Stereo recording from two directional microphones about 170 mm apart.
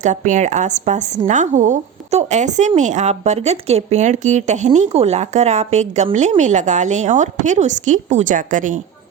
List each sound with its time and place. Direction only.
0.0 s a woman's voice: 45° right (ahead or behind)